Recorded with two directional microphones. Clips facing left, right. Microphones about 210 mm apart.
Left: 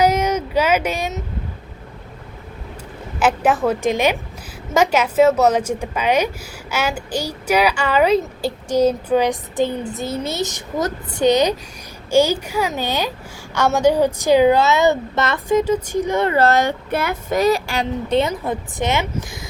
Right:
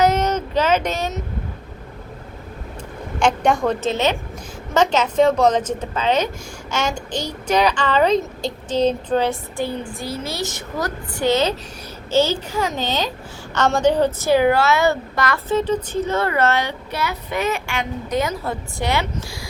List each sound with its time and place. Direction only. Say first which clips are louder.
0.0 s a sound: left 1 dB; 10° left (ahead or behind)
3.2 s a woman's voice: left 1 dB; 5° left (ahead or behind); by 15.4 s 25° left (ahead or behind)
15.4 s a woman's voice: left 5 dB; 10° left (ahead or behind)
16.3 s speech: left 4 dB; 35° left (ahead or behind); by 19.0 s 20° left (ahead or behind)